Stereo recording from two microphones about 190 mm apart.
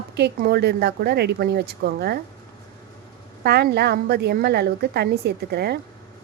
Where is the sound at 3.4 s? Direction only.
60° right (ahead or behind).